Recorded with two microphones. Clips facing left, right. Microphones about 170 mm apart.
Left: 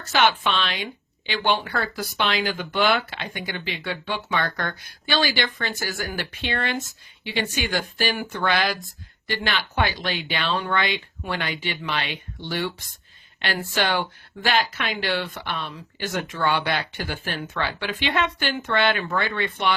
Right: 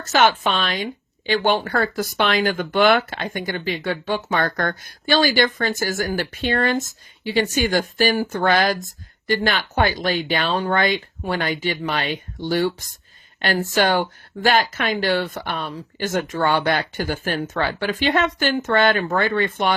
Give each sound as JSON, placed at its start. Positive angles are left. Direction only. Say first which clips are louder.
{"t": 0.0, "sound": "speech", "louder": "right 3 dB", "side_deg": -45}